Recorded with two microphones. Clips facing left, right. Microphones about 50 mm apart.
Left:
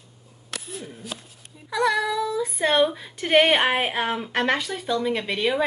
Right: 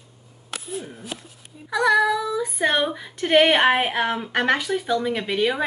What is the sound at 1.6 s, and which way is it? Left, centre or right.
Female singing, centre.